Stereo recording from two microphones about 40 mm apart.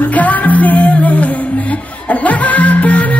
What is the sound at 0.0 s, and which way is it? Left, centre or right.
Music, left.